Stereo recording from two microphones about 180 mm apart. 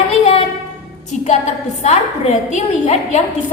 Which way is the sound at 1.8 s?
40° left (ahead or behind).